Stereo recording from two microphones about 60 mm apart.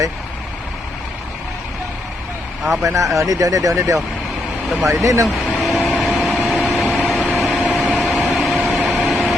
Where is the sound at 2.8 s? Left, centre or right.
Right.